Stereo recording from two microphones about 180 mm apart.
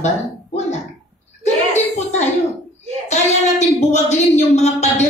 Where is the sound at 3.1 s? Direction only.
40° left (ahead or behind).